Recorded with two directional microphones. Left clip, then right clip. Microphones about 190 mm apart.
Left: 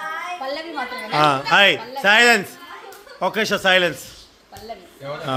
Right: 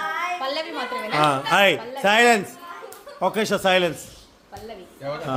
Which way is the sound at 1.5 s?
10° right (ahead or behind).